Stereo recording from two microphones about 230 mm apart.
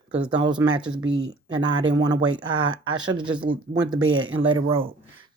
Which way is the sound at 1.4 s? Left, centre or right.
Centre.